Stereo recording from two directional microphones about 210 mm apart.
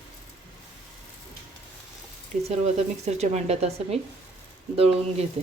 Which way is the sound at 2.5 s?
30° right (ahead or behind).